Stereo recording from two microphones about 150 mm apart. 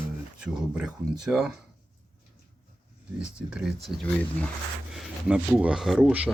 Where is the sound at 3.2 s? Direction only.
5° right (ahead or behind).